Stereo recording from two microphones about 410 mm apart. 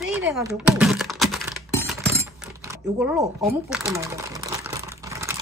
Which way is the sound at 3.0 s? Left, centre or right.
Centre.